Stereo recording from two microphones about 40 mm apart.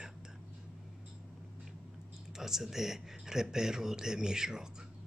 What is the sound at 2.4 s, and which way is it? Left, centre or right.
A man's voice, centre.